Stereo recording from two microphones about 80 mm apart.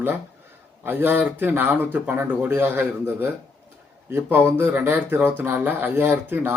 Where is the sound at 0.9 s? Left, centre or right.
Right.